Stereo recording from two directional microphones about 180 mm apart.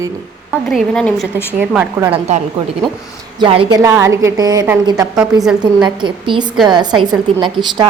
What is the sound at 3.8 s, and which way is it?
Speech, 15° right (ahead or behind).